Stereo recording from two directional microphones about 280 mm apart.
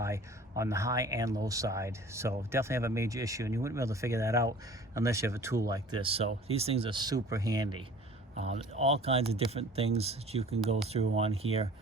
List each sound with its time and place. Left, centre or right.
0.0 s speech: centre